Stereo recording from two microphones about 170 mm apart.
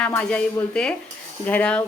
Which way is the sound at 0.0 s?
5° left (ahead or behind).